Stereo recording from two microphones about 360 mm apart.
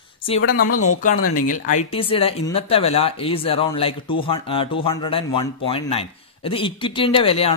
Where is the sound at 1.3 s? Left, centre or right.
Left.